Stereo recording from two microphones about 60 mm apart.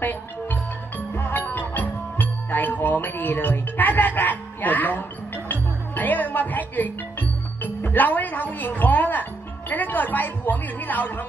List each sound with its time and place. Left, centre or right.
0.0 s music: left
9.7 s a woman's voice: left